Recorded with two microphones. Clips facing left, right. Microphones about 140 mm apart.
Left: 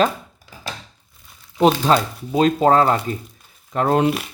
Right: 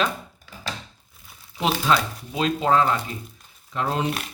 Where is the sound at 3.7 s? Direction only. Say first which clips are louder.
Left 8 dB; 55° left (ahead or behind).